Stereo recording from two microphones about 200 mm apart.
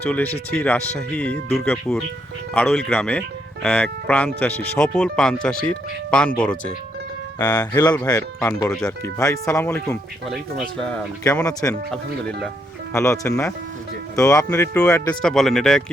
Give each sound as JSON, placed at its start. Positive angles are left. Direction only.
{"t": 0.0, "sound": "speech", "side_deg": 10}
{"t": 7.3, "sound": "speech", "side_deg": 20}
{"t": 10.2, "sound": "speech", "side_deg": 0}
{"t": 11.2, "sound": "speech", "side_deg": 15}
{"t": 12.9, "sound": "speech", "side_deg": 15}